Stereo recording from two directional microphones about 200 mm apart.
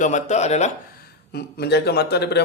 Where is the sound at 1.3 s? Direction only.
55° left (ahead or behind).